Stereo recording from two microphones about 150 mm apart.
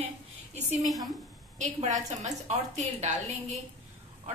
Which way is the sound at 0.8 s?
Centre (ahead or behind).